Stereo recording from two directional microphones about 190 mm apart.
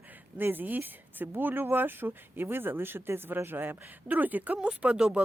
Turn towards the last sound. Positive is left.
turn(degrees=-5)  # may be behind; listen again after turning